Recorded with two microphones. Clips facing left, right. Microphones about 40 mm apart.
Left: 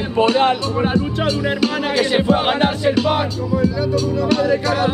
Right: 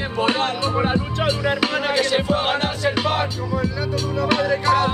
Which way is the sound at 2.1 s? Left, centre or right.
Centre.